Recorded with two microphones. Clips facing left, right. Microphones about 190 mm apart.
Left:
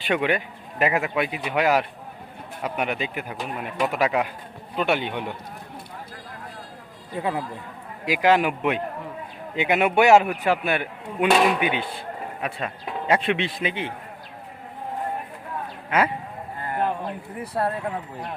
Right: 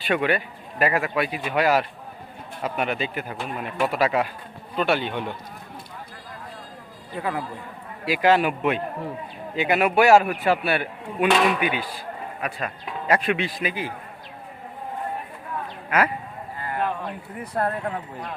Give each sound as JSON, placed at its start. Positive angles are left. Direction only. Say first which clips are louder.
{"t": 0.0, "sound": "speech", "louder": "even", "side_deg": 15}
{"t": 7.2, "sound": "speech", "louder": "left 1 dB", "side_deg": 25}
{"t": 16.7, "sound": "a sound", "louder": "left 1 dB", "side_deg": 20}
{"t": 17.5, "sound": "speech", "louder": "even", "side_deg": 5}